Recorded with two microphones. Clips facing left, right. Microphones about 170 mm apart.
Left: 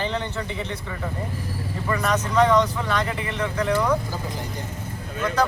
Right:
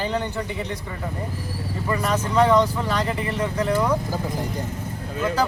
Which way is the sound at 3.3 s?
10° right (ahead or behind).